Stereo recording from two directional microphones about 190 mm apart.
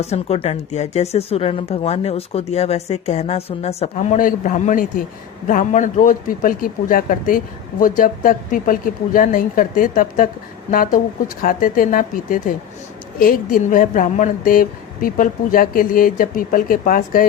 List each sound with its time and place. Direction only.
0.0 s a man's voice: 35° left (ahead or behind)